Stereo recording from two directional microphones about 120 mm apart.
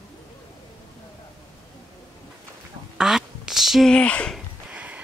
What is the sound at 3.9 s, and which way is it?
Speech, 10° left (ahead or behind).